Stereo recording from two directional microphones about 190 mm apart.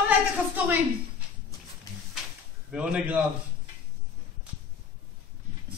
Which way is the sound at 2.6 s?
5° right (ahead or behind).